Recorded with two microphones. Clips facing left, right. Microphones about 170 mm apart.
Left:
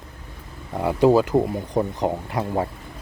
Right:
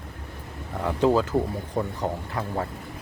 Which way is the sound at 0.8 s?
10° left (ahead or behind).